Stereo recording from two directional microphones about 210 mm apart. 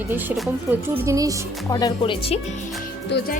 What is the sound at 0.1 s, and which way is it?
Speech, 10° right (ahead or behind).